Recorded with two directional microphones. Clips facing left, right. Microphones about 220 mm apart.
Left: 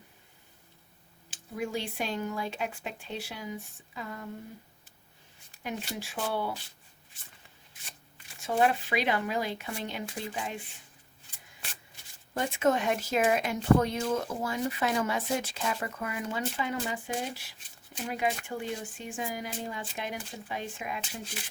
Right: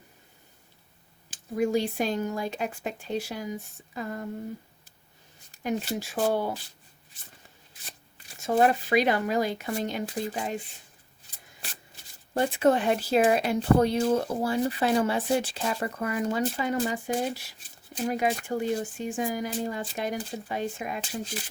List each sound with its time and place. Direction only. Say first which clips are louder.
1.3 s speech: right 8 dB; 40° right (ahead or behind)
5.6 s speech: right 7 dB; 40° right (ahead or behind)
8.4 s speech: right 4 dB; 40° right (ahead or behind)
12.3 s speech: right 4 dB; 35° right (ahead or behind)